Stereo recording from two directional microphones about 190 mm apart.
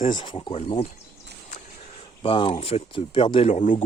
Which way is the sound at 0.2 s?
25° left (ahead or behind).